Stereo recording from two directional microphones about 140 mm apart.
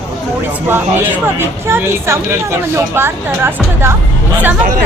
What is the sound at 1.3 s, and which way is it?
A woman's voice, 15° right (ahead or behind).